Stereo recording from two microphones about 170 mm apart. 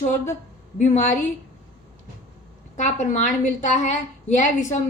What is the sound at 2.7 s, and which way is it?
A woman's voice, 45° left (ahead or behind).